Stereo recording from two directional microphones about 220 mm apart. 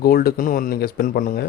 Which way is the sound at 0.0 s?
45° left (ahead or behind).